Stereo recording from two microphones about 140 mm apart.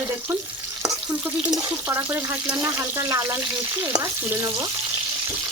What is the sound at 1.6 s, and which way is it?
Speech, 20° right (ahead or behind).